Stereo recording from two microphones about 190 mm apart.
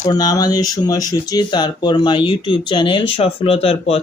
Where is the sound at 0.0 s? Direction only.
20° left (ahead or behind).